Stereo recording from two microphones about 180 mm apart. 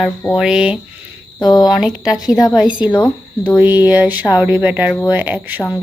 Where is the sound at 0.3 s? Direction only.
5° right (ahead or behind).